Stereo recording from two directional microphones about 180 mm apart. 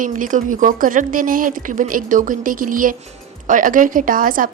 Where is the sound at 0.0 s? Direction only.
45° right (ahead or behind).